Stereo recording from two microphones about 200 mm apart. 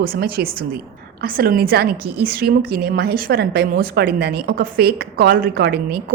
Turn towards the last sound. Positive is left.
turn(degrees=-50)  # may be behind; listen again after turning